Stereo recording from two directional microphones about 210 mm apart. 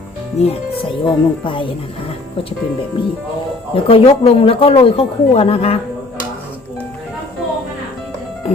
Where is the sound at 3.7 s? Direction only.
25° left (ahead or behind).